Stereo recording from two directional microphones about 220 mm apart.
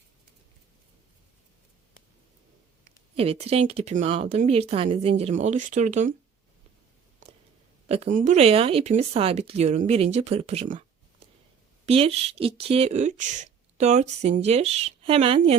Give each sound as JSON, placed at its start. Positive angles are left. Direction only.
{"t": 2.8, "sound": "speech", "side_deg": -25}
{"t": 7.9, "sound": "speech", "side_deg": -30}
{"t": 11.9, "sound": "speech", "side_deg": -25}